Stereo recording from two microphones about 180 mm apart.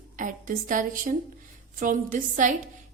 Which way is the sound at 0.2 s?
45° right (ahead or behind).